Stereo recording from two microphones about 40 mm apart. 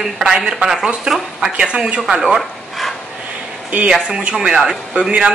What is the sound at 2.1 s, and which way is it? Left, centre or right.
Speech, centre.